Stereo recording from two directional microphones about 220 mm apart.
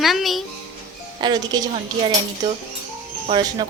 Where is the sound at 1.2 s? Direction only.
20° right (ahead or behind).